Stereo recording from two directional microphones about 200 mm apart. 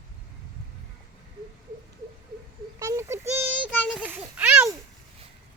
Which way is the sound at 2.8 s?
15° right (ahead or behind).